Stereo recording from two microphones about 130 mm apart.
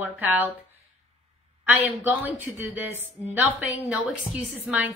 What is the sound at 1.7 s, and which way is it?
A woman's voice, 15° right (ahead or behind).